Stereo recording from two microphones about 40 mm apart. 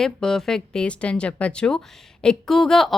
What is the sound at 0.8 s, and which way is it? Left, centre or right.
Speech, left.